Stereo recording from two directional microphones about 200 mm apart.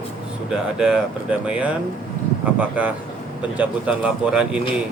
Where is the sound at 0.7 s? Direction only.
5° right (ahead or behind).